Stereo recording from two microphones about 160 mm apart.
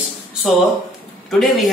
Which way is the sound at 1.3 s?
Centre (ahead or behind).